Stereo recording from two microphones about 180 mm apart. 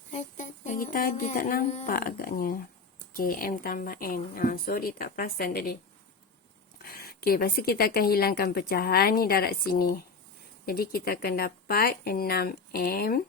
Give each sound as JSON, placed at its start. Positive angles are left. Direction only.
{"t": 0.1, "sound": "speech", "side_deg": 40}
{"t": 2.0, "sound": "a woman's voice", "side_deg": 55}
{"t": 6.8, "sound": "speech", "side_deg": 60}